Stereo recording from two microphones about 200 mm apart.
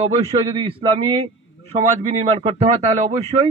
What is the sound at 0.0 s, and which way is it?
A man's voice, 30° right (ahead or behind).